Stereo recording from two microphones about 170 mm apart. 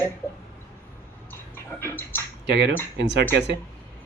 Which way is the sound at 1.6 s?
15° left (ahead or behind).